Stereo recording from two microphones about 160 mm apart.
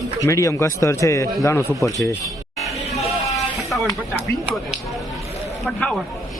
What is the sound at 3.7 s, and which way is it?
Music, centre (ahead or behind).